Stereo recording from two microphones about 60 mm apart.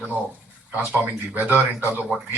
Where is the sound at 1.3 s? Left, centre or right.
Right.